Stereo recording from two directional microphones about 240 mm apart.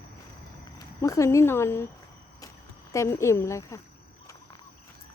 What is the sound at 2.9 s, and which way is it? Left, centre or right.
Speech, centre.